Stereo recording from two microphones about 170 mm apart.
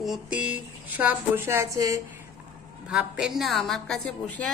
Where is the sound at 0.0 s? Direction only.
5° right (ahead or behind).